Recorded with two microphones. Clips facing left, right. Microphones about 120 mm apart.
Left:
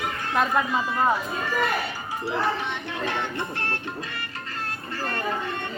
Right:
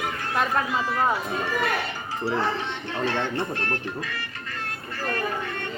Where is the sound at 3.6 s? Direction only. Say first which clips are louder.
Right 2 dB; 30° left (ahead or behind).